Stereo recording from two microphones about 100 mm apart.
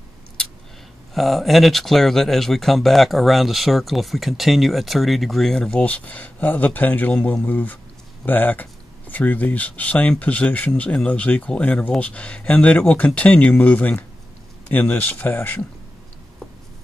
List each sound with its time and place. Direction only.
1.1 s speech: centre (ahead or behind); by 15.6 s 20° left (ahead or behind)